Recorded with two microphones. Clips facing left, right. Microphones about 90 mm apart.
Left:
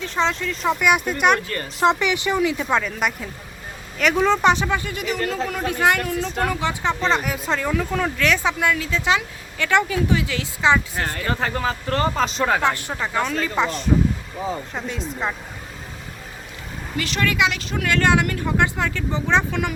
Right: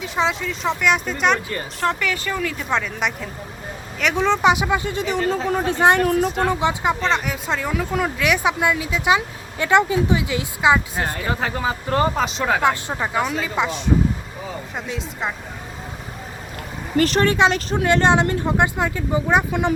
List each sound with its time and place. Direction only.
0.0 s speech: 5° right (ahead or behind)
1.8 s a woman's voice: 20° left (ahead or behind); by 4.6 s 5° right (ahead or behind)
4.6 s speech: 20° right (ahead or behind)
6.1 s speech: 50° right (ahead or behind)
6.4 s speech: 20° right (ahead or behind)
7.0 s speech: centre (ahead or behind); by 11.3 s 15° right (ahead or behind)
11.3 s speech: 5° right (ahead or behind)
12.6 s speech: 15° right (ahead or behind); by 15.4 s centre (ahead or behind)
17.0 s speech: 40° right (ahead or behind)
17.8 s speech: 25° right (ahead or behind)